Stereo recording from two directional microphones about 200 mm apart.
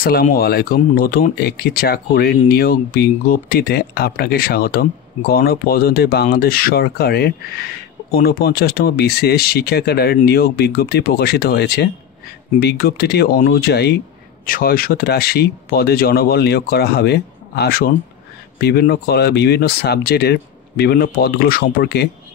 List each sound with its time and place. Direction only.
0.0 s speech: 45° left (ahead or behind)